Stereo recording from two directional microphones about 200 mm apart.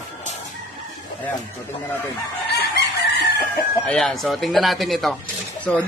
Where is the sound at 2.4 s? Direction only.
55° left (ahead or behind).